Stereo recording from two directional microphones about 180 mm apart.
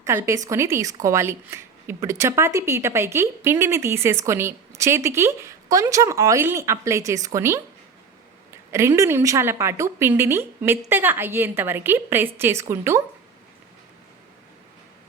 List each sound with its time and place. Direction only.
0.0 s speech: 15° right (ahead or behind)
8.7 s speech: 15° right (ahead or behind)